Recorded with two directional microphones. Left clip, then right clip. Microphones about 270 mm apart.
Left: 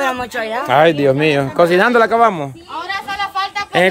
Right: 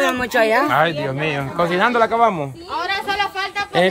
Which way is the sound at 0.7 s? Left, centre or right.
Left.